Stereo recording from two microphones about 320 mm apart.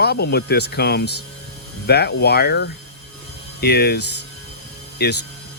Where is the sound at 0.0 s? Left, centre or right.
Left.